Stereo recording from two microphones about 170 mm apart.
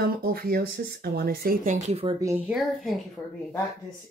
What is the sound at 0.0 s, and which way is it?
Speech, 60° right (ahead or behind).